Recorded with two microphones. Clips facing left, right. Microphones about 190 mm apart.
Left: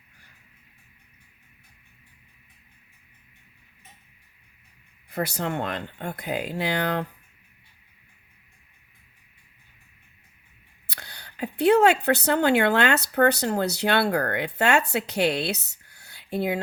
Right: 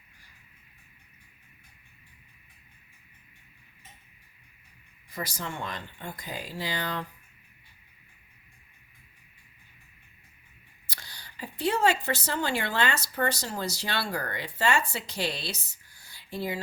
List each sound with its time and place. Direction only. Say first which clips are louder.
5.0 s speech: left 8 dB; 65° left (ahead or behind)
10.8 s speech: left 5 dB; 65° left (ahead or behind)